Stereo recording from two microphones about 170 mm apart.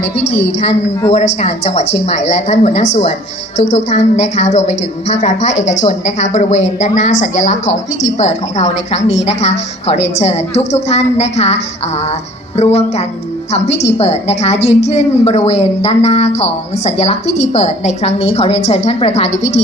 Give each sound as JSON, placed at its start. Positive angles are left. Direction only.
{"t": 0.3, "sound": "a woman's voice", "side_deg": 40}